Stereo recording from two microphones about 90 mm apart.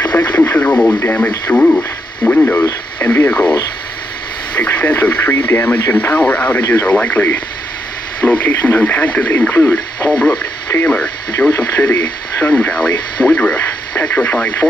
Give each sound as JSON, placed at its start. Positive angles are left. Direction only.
{"t": 0.0, "sound": "radio", "side_deg": 20}
{"t": 1.5, "sound": "speech", "side_deg": 20}
{"t": 4.6, "sound": "speech", "side_deg": 20}
{"t": 11.5, "sound": "speech", "side_deg": 35}
{"t": 12.4, "sound": "speech", "side_deg": 15}